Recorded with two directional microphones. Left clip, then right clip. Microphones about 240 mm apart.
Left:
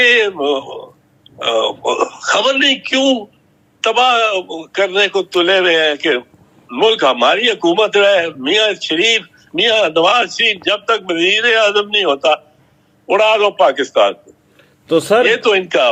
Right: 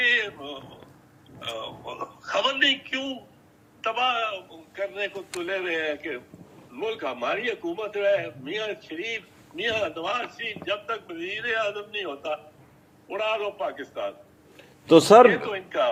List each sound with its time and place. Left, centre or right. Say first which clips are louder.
0.0 s a man's voice: left 12 dB; left
2.3 s speech: left 9 dB; left
3.8 s a man's voice: left 13 dB; left
14.8 s a man's voice: left 1 dB; centre
15.3 s a man's voice: left 14 dB; left